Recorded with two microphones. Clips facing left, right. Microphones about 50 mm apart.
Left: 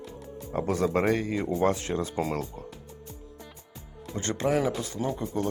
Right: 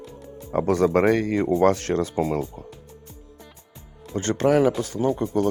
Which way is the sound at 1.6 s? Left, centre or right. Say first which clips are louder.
Right 5 dB; right.